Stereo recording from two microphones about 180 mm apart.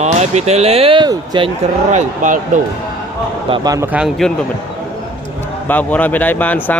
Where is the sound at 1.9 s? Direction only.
45° right (ahead or behind).